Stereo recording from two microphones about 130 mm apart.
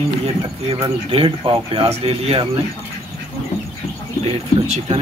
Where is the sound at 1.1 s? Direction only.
40° right (ahead or behind).